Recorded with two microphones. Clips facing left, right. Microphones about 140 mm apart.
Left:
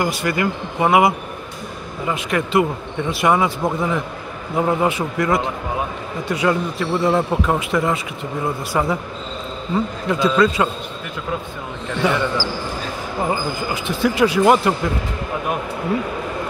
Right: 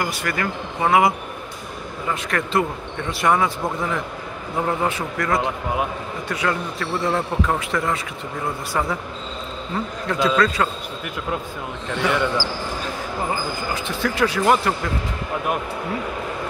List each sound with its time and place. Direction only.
0.0 s a man's voice: 20° left (ahead or behind)
10.2 s a man's voice: 10° left (ahead or behind)
12.0 s a man's voice: 10° left (ahead or behind)
14.0 s a man's voice: 15° left (ahead or behind)